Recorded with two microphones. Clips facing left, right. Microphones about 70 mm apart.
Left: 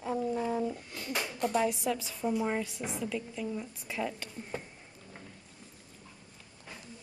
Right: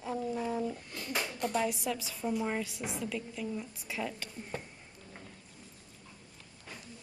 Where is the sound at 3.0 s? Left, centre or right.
Centre.